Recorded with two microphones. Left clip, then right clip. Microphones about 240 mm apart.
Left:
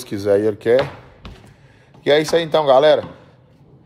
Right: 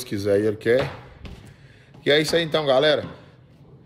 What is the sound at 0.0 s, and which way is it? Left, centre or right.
Speech, centre.